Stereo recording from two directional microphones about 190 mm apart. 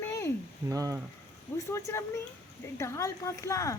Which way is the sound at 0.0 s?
15° left (ahead or behind).